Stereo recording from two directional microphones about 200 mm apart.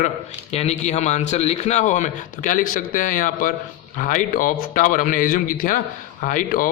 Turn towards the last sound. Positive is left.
turn(degrees=45)  # may be behind; listen again after turning